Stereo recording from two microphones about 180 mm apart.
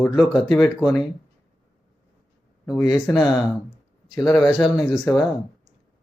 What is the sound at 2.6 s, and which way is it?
Speech, 10° left (ahead or behind).